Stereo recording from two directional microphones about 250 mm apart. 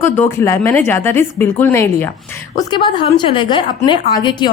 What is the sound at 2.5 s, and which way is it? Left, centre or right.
A woman's voice, centre.